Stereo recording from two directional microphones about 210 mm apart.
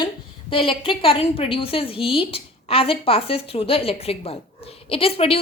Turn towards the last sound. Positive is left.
turn(degrees=25)  # may be behind; listen again after turning